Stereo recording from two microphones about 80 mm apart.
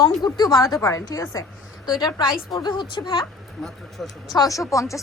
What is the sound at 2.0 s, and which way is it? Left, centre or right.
A woman's voice, left.